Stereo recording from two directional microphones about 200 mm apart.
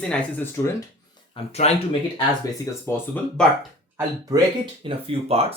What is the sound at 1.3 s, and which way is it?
Speech, 30° left (ahead or behind).